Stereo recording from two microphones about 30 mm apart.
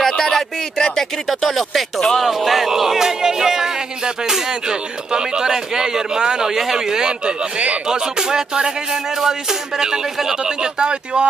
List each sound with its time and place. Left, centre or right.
0.2 s a sound: centre
1.2 s speech: centre
2.2 s speech: centre; by 6.5 s right
6.5 s speech: centre
7.5 s speech: right
7.8 s speech: right
10.4 s speech: right